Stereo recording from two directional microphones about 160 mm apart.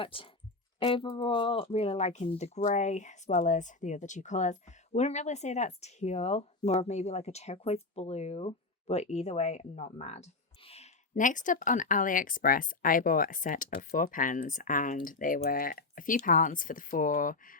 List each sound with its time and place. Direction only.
0.0 s speech: 30° left (ahead or behind); by 17.6 s 60° left (ahead or behind)